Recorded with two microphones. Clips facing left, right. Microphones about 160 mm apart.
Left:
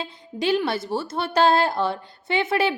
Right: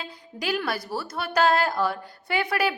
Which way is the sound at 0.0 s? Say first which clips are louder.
Left 7 dB; 25° left (ahead or behind).